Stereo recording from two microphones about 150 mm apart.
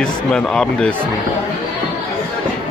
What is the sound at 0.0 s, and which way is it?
Speech, 5° left (ahead or behind).